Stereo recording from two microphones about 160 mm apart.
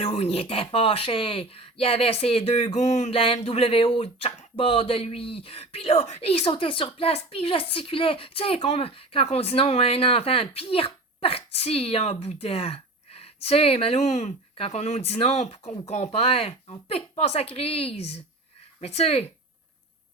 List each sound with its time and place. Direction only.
0.0 s speech: 35° left (ahead or behind)